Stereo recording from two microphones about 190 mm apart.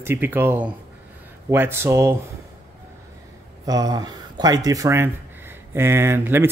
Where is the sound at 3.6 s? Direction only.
20° right (ahead or behind).